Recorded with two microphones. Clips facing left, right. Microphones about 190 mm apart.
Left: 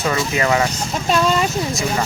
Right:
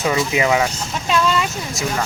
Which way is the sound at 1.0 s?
40° left (ahead or behind).